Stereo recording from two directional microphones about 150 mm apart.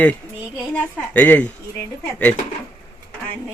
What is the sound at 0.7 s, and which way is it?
Speech, 10° left (ahead or behind).